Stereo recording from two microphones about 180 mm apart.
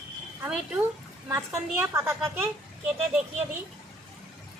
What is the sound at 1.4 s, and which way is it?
Speech, 15° right (ahead or behind).